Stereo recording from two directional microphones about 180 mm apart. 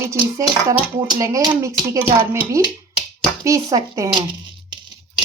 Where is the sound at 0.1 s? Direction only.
15° right (ahead or behind).